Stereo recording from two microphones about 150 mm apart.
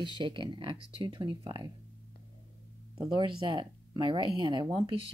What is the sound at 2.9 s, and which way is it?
A woman's voice, 30° right (ahead or behind).